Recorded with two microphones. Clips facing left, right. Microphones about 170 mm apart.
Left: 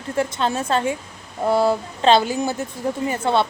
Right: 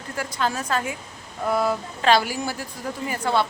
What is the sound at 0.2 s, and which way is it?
A woman's voice, 25° left (ahead or behind).